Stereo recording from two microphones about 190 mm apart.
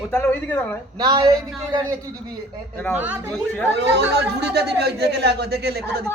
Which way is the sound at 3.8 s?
65° right (ahead or behind).